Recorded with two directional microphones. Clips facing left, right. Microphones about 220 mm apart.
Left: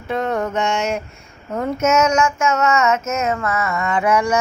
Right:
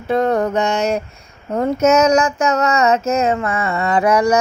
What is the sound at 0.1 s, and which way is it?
Mantra, 35° right (ahead or behind).